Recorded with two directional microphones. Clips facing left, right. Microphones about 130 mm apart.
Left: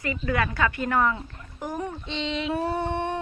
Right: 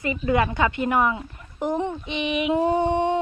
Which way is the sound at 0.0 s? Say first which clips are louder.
Right 5 dB; 20° right (ahead or behind).